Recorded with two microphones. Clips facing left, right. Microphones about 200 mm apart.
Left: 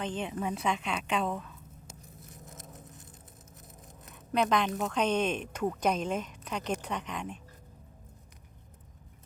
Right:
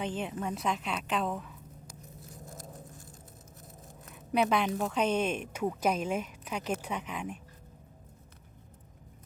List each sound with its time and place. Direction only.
0.0 s a woman's voice: 5° right (ahead or behind)
1.9 s patter: 20° left (ahead or behind)
4.3 s speech: 10° right (ahead or behind)